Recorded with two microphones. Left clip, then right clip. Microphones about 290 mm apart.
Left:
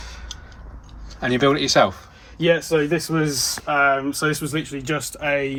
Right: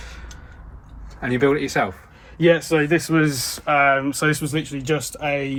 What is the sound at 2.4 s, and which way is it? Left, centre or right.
Speech, right.